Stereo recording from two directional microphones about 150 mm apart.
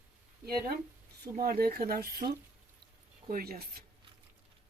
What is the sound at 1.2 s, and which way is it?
Speech, 75° right (ahead or behind).